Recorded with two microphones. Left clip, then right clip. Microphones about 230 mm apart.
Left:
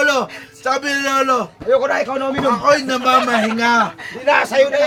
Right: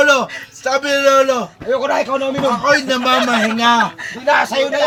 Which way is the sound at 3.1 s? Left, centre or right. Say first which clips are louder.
Even; centre.